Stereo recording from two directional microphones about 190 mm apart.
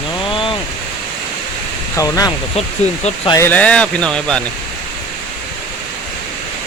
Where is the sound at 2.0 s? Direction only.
20° left (ahead or behind).